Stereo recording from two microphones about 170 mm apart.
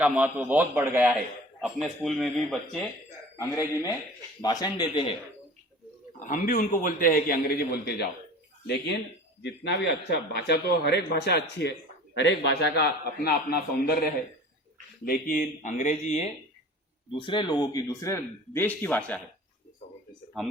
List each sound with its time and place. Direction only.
0.0 s a man's voice: 10° right (ahead or behind)
1.6 s speech: centre (ahead or behind)
3.3 s speech: 20° left (ahead or behind)
6.1 s a man's voice: 50° left (ahead or behind); by 8.0 s 70° left (ahead or behind)
9.4 s a man's voice: 90° left
12.1 s a man's voice: 90° left; by 16.3 s 45° left (ahead or behind)
17.1 s speech: 30° left (ahead or behind); by 19.2 s 10° left (ahead or behind)
20.4 s speech: centre (ahead or behind)